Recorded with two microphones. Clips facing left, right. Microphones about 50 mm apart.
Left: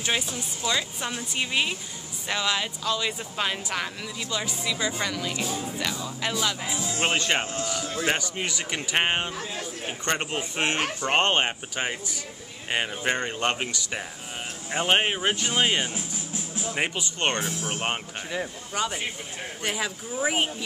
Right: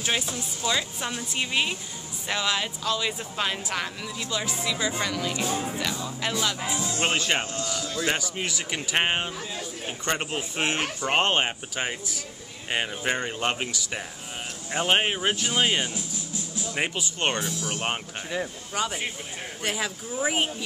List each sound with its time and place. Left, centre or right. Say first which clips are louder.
0.7 s speech: even; centre
5.5 s speech: right 3 dB; right
5.8 s speech: even; centre
6.7 s speech: right 1 dB; right
7.8 s a sound: even; left
8.2 s speech: even; centre
15.8 s music: even; left
16.7 s speech: even; centre
17.4 s speech: even; left
17.8 s speech: even; centre